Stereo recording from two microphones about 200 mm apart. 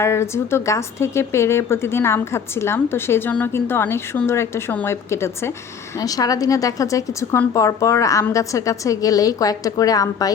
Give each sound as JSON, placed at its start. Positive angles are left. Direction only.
{"t": 0.0, "sound": "a woman's voice", "side_deg": 15}